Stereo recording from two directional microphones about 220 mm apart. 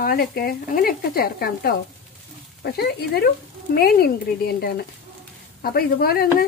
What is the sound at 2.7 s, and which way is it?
Speech, 45° left (ahead or behind).